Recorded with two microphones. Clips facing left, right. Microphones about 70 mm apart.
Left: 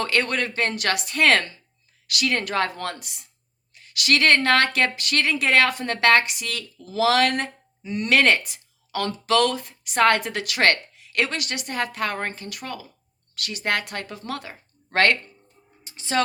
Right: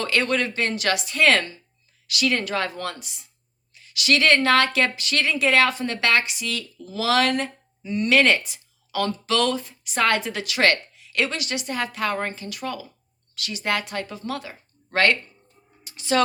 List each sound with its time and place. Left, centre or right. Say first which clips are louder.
0.0 s a woman's voice: right 1 dB; left
7.9 s a woman's voice: right 1 dB; left
15.8 s a sound: right 2 dB; left